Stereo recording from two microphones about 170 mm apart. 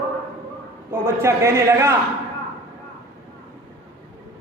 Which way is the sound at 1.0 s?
15° right (ahead or behind).